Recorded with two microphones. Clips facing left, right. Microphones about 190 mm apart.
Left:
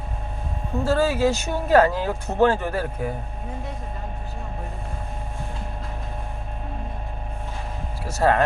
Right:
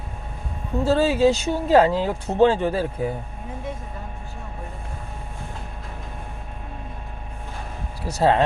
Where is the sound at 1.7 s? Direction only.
20° right (ahead or behind).